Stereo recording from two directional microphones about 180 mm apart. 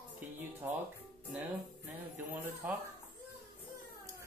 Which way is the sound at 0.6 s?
5° right (ahead or behind).